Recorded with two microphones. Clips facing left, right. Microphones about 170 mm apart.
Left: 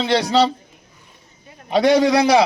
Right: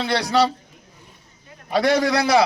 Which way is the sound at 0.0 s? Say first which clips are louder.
Left 3 dB; 25° left (ahead or behind).